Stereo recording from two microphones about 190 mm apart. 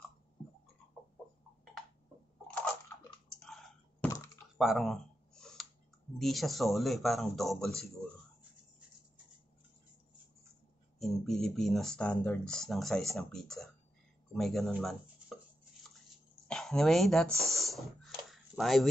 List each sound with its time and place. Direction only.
3.3 s clicking: 5° left (ahead or behind)
4.6 s a sound: centre (ahead or behind)
6.1 s speech: centre (ahead or behind)
11.0 s speech: centre (ahead or behind)
16.4 s speech: 5° left (ahead or behind)
17.5 s snake: centre (ahead or behind)